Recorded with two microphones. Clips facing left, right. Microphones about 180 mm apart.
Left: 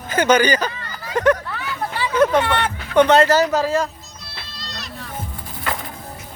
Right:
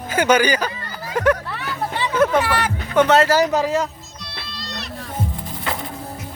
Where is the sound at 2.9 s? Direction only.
5° right (ahead or behind).